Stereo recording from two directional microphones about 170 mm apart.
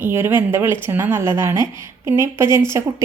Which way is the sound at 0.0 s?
15° right (ahead or behind).